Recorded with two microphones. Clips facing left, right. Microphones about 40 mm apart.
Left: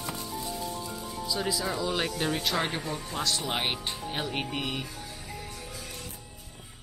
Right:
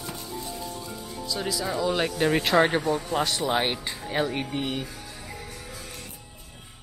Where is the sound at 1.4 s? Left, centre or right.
Centre.